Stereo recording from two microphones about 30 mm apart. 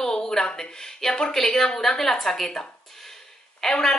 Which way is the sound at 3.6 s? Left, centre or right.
Left.